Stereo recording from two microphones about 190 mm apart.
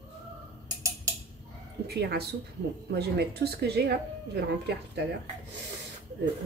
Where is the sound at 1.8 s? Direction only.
60° right (ahead or behind).